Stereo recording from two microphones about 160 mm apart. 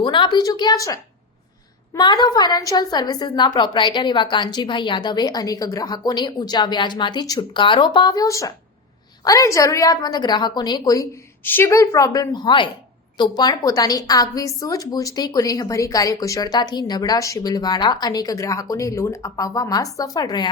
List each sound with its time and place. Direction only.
0.0 s a woman's voice: 30° left (ahead or behind)